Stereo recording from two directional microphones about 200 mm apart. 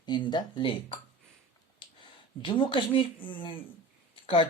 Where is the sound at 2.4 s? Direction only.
25° left (ahead or behind).